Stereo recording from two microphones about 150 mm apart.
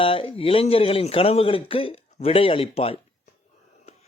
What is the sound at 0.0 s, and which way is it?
Speech, 35° left (ahead or behind).